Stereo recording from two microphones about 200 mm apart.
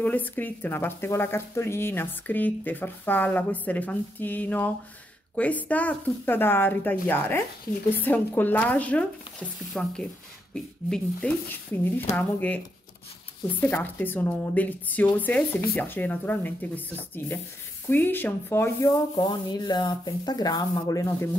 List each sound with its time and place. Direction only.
0.0 s speech: 10° left (ahead or behind)
13.6 s speech: 10° left (ahead or behind)